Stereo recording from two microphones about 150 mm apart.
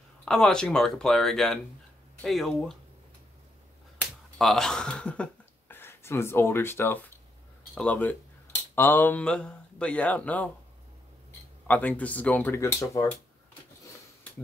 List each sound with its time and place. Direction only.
0.2 s speech: 5° left (ahead or behind)
4.4 s speech: centre (ahead or behind)
11.6 s speech: 10° left (ahead or behind)